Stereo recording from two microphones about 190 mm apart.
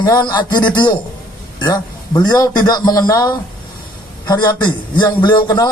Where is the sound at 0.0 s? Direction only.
20° left (ahead or behind).